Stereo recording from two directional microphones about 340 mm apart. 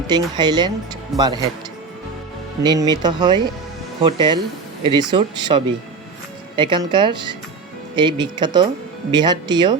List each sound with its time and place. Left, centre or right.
0.1 s speech: centre
2.6 s speech: centre